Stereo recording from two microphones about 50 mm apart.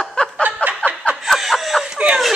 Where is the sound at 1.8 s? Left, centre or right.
Right.